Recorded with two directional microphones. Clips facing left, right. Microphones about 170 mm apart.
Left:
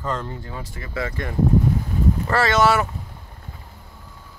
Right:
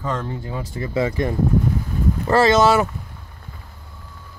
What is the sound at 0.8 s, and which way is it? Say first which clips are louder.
Speech: right 8 dB; 20° right (ahead or behind).